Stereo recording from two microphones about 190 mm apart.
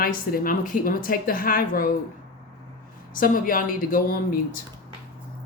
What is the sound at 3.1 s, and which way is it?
Speech, 45° left (ahead or behind).